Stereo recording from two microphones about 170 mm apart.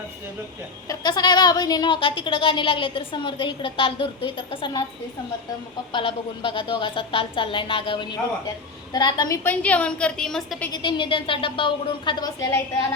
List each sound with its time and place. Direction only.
0.9 s speech: 25° left (ahead or behind)
5.9 s speech: 30° left (ahead or behind)
9.4 s a woman's voice: 10° left (ahead or behind)
10.7 s speech: 30° left (ahead or behind)